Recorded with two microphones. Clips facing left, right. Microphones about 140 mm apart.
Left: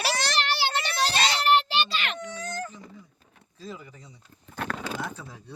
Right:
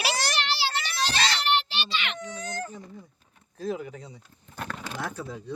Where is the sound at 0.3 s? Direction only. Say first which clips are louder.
Left 2 dB; 50° left (ahead or behind).